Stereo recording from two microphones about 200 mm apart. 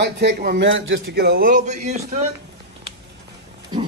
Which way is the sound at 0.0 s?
60° right (ahead or behind).